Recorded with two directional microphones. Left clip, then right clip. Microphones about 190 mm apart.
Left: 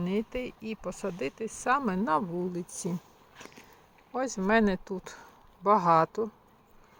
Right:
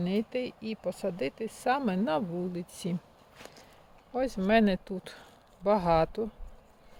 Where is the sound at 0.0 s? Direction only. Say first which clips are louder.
Right 1 dB; 15° right (ahead or behind).